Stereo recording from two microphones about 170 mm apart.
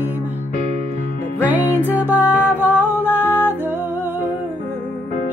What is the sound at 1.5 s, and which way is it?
Music, 10° right (ahead or behind).